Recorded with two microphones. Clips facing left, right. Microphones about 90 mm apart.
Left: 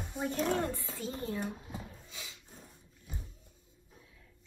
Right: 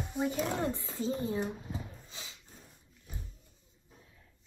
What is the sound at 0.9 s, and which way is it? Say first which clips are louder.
Speech: right 7 dB; 20° right (ahead or behind).